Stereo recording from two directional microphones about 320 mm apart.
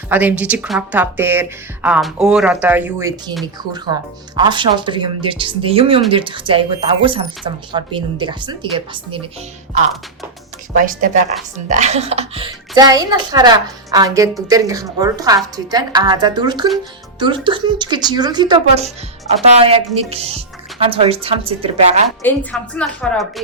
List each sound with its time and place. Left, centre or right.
0.1 s speech: centre
4.4 s speech: centre
10.8 s speech: right
22.2 s speech: centre